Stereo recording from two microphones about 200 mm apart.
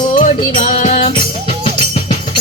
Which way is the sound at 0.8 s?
35° left (ahead or behind).